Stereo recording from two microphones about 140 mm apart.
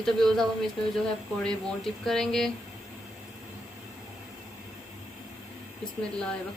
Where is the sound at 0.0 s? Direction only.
Centre (ahead or behind).